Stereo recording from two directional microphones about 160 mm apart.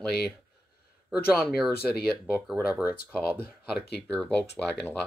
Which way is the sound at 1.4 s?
Centre (ahead or behind).